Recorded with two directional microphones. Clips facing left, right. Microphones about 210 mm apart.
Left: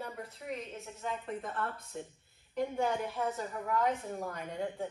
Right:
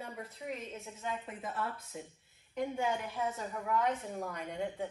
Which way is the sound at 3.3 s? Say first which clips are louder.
Left 1 dB; centre (ahead or behind).